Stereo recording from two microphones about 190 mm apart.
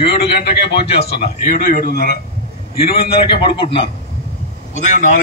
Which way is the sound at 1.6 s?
45° left (ahead or behind).